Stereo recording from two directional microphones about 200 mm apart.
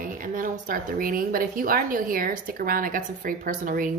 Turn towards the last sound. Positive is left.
turn(degrees=-40)  # may be behind; listen again after turning